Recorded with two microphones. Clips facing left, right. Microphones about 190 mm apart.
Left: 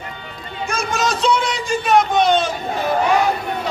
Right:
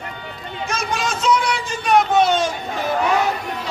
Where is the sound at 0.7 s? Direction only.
50° left (ahead or behind); by 1.6 s 25° left (ahead or behind).